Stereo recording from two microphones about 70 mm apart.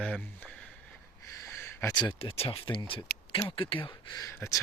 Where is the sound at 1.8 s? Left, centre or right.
Left.